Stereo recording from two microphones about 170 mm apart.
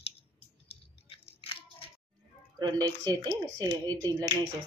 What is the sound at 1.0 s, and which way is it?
Biting, 35° left (ahead or behind).